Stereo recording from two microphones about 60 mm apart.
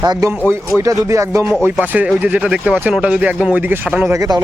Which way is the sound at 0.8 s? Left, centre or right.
Right.